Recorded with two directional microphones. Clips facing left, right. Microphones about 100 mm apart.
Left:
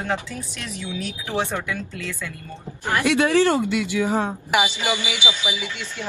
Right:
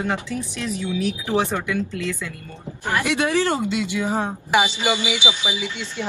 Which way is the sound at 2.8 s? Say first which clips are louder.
Left 2 dB; 20° right (ahead or behind).